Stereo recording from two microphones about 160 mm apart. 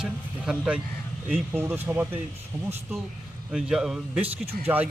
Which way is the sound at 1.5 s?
15° right (ahead or behind).